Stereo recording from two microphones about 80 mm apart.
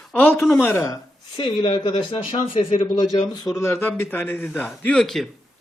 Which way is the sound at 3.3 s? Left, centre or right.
Left.